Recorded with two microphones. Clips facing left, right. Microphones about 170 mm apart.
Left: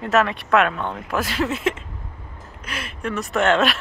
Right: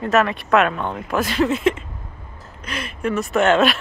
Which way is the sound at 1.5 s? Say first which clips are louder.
Right 4 dB; 5° left (ahead or behind).